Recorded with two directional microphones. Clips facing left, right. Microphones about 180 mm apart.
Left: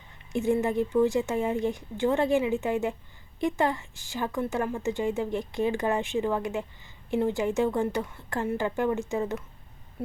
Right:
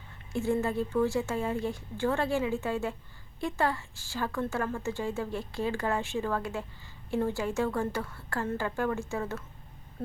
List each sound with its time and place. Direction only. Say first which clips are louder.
0.3 s a woman's voice: left 4 dB; 20° left (ahead or behind)